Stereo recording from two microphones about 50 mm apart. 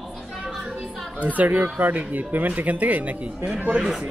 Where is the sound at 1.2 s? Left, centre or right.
Right.